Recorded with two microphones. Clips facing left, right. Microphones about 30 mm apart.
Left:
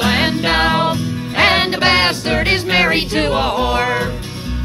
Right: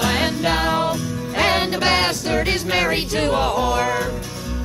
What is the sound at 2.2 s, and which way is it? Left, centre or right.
Music, left.